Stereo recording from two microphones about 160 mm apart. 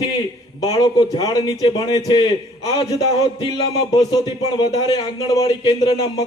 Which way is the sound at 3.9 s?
25° left (ahead or behind).